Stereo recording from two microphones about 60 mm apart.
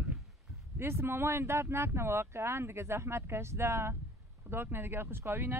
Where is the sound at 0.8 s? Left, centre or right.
Right.